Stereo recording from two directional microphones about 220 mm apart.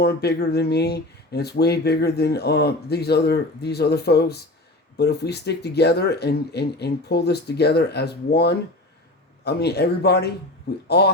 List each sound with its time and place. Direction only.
0.0 s speech: 45° left (ahead or behind)